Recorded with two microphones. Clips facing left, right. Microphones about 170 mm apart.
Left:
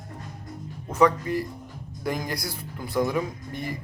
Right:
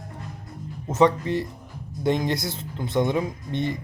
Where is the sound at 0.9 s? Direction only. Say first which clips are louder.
Right 1 dB; 25° right (ahead or behind).